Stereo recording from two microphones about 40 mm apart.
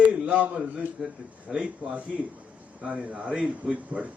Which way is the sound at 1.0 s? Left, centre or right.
Right.